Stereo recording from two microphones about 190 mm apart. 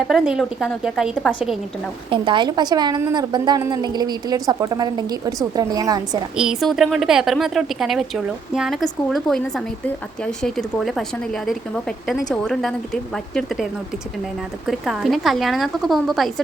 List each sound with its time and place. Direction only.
0.1 s a woman's voice: centre (ahead or behind)
2.0 s a woman's voice: 25° right (ahead or behind)
6.3 s a woman's voice: 5° right (ahead or behind)
14.7 s a woman's voice: centre (ahead or behind)